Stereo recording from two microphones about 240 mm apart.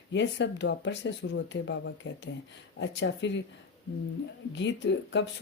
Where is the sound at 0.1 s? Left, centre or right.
Left.